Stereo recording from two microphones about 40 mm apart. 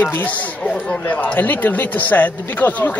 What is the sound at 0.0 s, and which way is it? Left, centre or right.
Speech, left.